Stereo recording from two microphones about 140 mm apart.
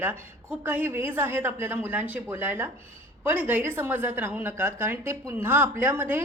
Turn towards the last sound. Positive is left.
turn(degrees=-15)  # may be behind; listen again after turning